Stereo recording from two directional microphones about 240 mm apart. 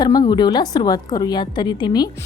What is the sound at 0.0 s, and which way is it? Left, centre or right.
A woman's voice, centre.